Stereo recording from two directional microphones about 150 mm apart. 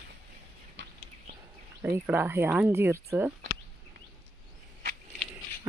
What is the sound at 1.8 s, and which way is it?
Speech, 15° right (ahead or behind).